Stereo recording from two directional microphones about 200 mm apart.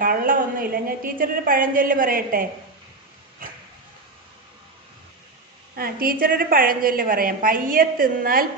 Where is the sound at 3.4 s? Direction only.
45° right (ahead or behind).